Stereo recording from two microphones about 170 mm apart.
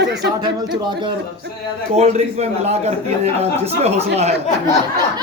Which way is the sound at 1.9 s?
40° right (ahead or behind).